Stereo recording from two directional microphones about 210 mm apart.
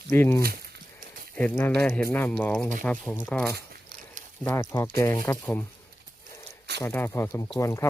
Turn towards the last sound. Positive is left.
turn(degrees=15)  # may be behind; listen again after turning